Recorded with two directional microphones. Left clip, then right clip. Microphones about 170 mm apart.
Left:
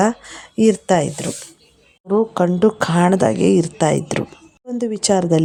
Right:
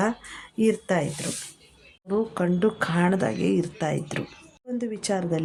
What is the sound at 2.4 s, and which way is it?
A woman's voice, 35° left (ahead or behind).